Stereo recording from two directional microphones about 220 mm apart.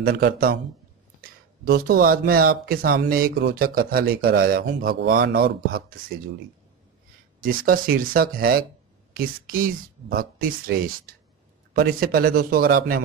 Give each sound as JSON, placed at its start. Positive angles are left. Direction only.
{"t": 0.0, "sound": "speech", "side_deg": -45}
{"t": 7.4, "sound": "speech", "side_deg": -40}